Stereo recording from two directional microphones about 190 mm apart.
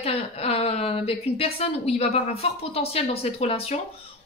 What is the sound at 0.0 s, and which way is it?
A woman's voice, 30° left (ahead or behind).